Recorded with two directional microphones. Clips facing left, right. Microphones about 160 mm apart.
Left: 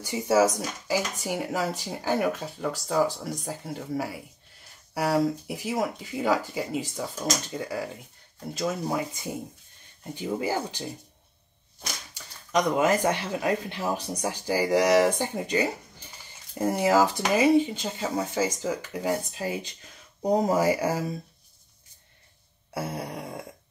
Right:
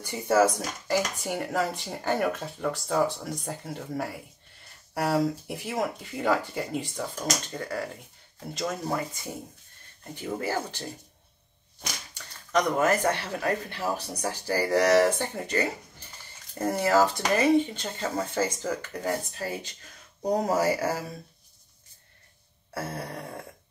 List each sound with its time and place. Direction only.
0.1 s speech: 10° left (ahead or behind)
12.1 s speech: 15° left (ahead or behind)
22.8 s speech: 15° left (ahead or behind)